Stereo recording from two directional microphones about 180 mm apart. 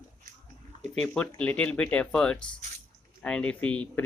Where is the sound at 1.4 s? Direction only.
5° left (ahead or behind).